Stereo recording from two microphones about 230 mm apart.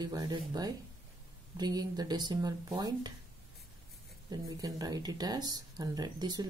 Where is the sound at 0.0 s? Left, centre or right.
Centre.